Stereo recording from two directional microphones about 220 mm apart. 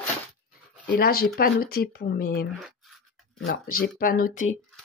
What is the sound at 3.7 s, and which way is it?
Speech, 40° left (ahead or behind).